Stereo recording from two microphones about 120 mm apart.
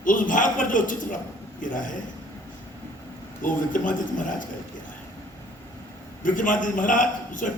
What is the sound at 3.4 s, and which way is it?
Speech, 90° left.